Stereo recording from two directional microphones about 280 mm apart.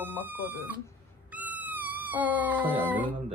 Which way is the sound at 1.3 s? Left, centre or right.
Centre.